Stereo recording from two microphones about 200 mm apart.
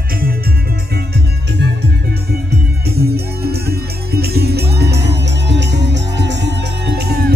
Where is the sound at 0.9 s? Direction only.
55° right (ahead or behind).